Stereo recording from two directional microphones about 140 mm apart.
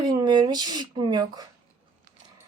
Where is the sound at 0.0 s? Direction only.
30° right (ahead or behind).